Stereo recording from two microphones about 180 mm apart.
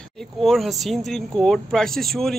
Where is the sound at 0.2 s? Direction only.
Centre (ahead or behind).